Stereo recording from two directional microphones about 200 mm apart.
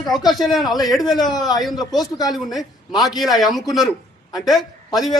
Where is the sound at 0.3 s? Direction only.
Centre (ahead or behind).